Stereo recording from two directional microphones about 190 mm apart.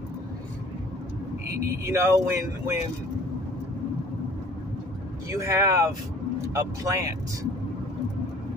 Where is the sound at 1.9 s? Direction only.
15° right (ahead or behind).